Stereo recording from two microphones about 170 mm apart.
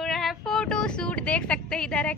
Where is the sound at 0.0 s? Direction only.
Centre (ahead or behind).